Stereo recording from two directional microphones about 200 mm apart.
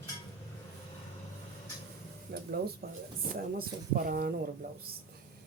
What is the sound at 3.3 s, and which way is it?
Speech, 45° right (ahead or behind).